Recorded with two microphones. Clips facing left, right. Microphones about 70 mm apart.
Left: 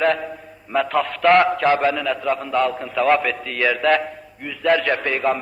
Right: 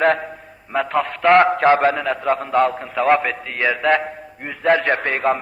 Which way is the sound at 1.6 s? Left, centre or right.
Right.